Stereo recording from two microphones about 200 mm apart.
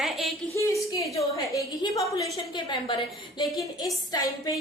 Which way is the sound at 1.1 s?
15° left (ahead or behind).